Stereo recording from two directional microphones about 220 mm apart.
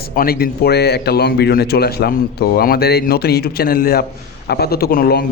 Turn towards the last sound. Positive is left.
turn(degrees=45)  # may be behind; listen again after turning